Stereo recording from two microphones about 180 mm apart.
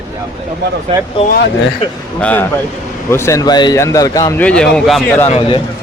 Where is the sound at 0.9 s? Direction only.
30° right (ahead or behind).